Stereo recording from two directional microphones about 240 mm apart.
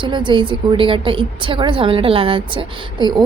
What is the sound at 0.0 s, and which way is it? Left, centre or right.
A woman's voice, centre.